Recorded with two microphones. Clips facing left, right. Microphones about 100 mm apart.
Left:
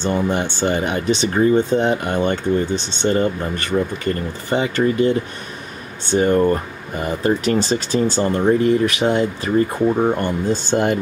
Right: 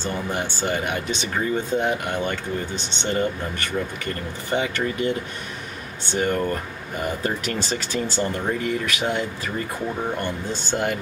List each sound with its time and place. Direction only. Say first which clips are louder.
0.0 s speech: left 7 dB; 25° left (ahead or behind)
3.0 s speech: left 5 dB; 40° left (ahead or behind)
6.1 s speech: left 8 dB; 30° left (ahead or behind)
8.5 s speech: left 9 dB; 25° left (ahead or behind)
9.9 s speech: left 8 dB; 40° left (ahead or behind)
10.7 s speech: left 5 dB; 25° left (ahead or behind)